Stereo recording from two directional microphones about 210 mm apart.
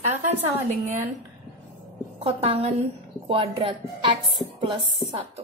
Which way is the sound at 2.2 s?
30° right (ahead or behind).